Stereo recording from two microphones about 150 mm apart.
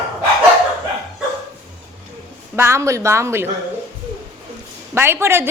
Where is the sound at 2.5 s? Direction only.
15° right (ahead or behind).